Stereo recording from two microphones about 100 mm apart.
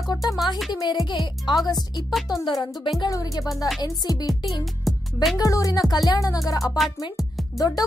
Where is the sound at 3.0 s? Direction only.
40° left (ahead or behind).